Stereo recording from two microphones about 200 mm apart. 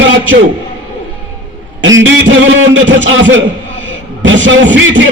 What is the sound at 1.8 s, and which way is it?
A man's voice, 70° right (ahead or behind).